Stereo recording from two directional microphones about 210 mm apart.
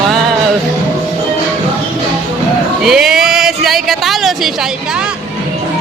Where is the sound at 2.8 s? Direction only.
Centre (ahead or behind).